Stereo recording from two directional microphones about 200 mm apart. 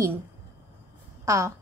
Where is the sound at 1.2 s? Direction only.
15° right (ahead or behind).